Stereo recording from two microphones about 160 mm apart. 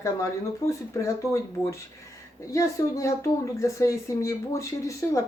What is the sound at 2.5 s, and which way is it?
Speech, 20° left (ahead or behind).